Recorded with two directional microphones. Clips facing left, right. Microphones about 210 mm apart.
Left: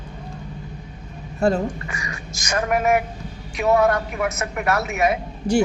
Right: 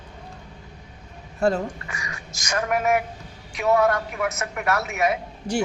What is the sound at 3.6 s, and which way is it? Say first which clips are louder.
A man's voice: left 2 dB; 25° left (ahead or behind).